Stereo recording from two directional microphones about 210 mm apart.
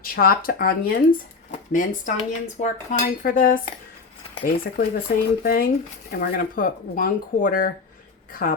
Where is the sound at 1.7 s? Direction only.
40° left (ahead or behind).